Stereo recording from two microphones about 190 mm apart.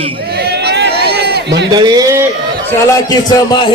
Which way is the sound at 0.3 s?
55° right (ahead or behind).